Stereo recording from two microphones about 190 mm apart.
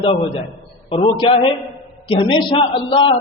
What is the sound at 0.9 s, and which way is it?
A man's voice, 25° left (ahead or behind).